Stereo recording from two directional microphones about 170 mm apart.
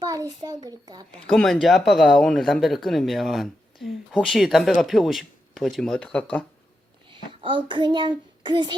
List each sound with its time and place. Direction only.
0.0 s a sound: 20° right (ahead or behind)
0.4 s a child's voice: 20° right (ahead or behind)
1.3 s speech: 5° left (ahead or behind)
7.1 s a child's voice: 30° right (ahead or behind)